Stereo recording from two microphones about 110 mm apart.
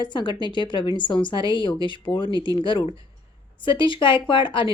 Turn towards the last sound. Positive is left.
turn(degrees=45)  # may be behind; listen again after turning